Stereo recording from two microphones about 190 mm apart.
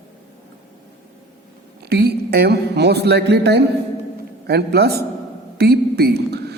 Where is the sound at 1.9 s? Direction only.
55° right (ahead or behind).